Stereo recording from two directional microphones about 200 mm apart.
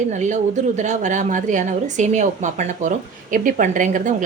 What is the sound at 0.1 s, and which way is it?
A woman's voice, 35° right (ahead or behind).